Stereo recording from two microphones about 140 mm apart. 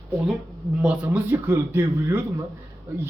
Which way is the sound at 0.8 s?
10° right (ahead or behind).